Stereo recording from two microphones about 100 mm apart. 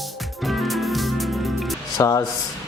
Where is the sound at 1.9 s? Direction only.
35° left (ahead or behind).